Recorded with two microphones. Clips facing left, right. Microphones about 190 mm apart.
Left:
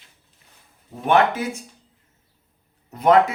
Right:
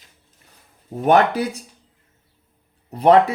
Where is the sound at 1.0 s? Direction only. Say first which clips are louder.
Right 3 dB; 40° right (ahead or behind).